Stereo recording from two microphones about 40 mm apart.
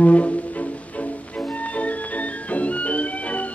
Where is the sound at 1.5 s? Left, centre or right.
Left.